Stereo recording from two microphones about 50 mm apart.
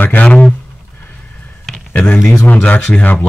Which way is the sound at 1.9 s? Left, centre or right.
Left.